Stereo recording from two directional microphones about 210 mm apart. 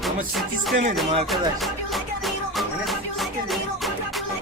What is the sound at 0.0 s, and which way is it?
Music, centre (ahead or behind).